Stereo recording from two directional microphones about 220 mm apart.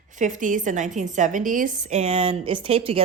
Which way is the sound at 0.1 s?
35° right (ahead or behind).